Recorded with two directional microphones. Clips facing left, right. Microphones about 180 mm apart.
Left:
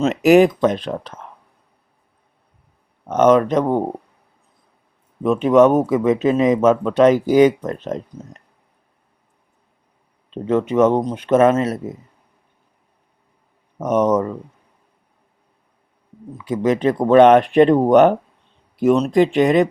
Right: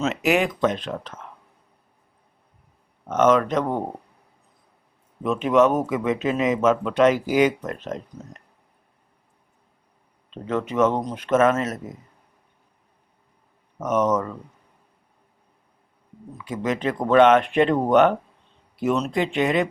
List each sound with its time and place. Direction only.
0.0 s speech: 40° left (ahead or behind)
3.1 s speech: 35° left (ahead or behind)
5.5 s speech: 35° left (ahead or behind)
10.3 s speech: 35° left (ahead or behind)
13.7 s speech: 35° left (ahead or behind)
16.4 s speech: 35° left (ahead or behind)